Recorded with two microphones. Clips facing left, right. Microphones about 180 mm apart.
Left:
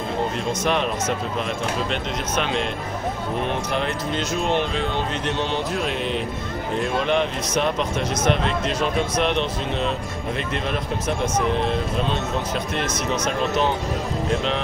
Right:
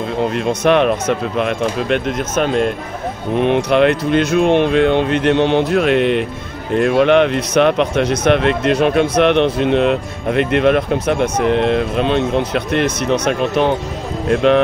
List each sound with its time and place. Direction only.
0.5 s speech: 65° right (ahead or behind); by 2.7 s 45° right (ahead or behind)
3.4 s speech: 70° right (ahead or behind)